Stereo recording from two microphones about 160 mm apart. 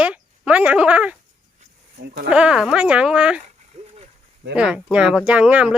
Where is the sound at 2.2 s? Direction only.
5° right (ahead or behind).